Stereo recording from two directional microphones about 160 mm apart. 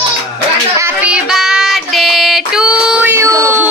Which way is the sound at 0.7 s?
10° right (ahead or behind).